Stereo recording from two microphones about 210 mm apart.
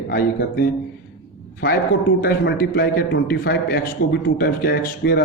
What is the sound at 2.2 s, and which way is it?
A man's voice, 50° left (ahead or behind).